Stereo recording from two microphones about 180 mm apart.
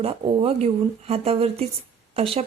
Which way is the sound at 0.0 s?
30° right (ahead or behind).